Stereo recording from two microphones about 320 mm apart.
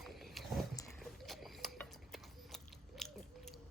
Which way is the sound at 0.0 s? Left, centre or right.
Centre.